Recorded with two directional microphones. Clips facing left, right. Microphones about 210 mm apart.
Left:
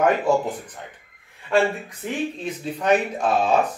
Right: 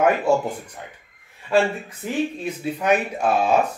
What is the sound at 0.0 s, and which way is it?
Speech, 10° right (ahead or behind).